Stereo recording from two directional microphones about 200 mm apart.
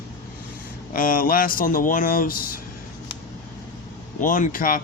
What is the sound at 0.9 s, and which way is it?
Speech, 45° left (ahead or behind).